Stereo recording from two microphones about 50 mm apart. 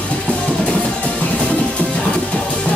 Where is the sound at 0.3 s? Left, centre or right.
Left.